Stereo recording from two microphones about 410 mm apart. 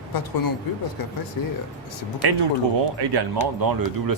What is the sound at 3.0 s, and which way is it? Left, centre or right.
Speech, right.